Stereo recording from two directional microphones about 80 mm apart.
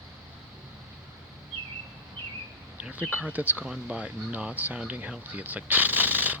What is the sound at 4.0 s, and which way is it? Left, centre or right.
Speech, centre.